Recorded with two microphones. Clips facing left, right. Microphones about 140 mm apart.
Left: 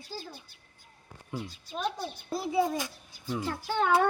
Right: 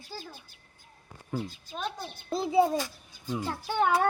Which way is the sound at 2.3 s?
25° right (ahead or behind).